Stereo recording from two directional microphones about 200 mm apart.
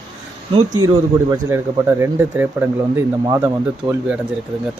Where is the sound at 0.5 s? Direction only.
20° right (ahead or behind).